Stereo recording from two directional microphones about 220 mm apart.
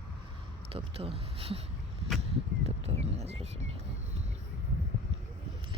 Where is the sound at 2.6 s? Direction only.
30° right (ahead or behind).